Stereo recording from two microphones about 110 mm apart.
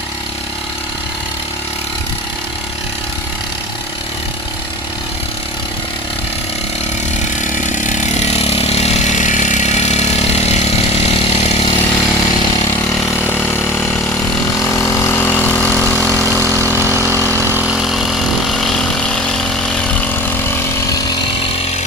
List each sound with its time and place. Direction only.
7.9 s chainsaw: 90° left; by 11.8 s 70° left (ahead or behind)
13.0 s vehicle: 25° left (ahead or behind); by 16.1 s 5° left (ahead or behind)
16.6 s vehicle: 20° right (ahead or behind)
17.7 s vehicle: centre (ahead or behind); by 20.9 s 20° left (ahead or behind)